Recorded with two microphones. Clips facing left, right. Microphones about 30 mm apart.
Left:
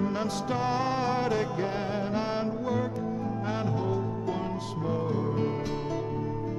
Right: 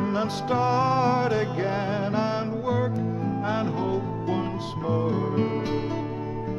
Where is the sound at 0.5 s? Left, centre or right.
Centre; by 5.7 s right.